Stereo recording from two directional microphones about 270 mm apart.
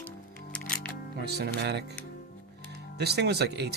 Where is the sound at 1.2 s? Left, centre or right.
Right.